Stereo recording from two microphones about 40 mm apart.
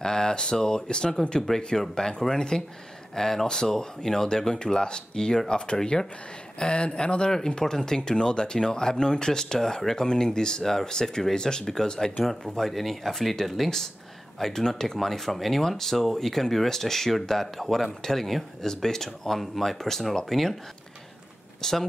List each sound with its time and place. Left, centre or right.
0.0 s speech: centre
3.2 s speech: centre
12.3 s speech: centre
21.5 s speech: centre